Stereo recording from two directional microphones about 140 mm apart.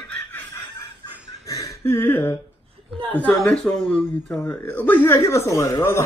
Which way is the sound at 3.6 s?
Centre (ahead or behind).